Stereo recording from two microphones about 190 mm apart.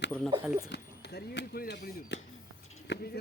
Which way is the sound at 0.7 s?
65° left (ahead or behind).